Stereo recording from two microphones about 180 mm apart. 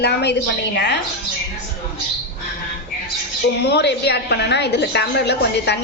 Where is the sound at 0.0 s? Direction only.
70° left (ahead or behind).